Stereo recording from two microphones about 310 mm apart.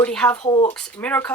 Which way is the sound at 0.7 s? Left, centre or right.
Centre.